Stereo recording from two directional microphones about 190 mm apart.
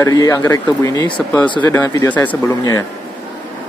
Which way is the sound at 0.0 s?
15° left (ahead or behind).